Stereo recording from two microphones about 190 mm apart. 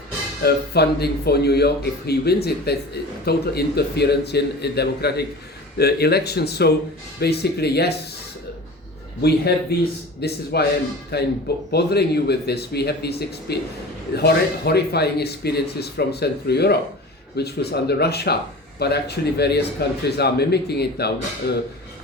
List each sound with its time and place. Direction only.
0.4 s speech: 60° left (ahead or behind)
9.2 s speech: 55° left (ahead or behind)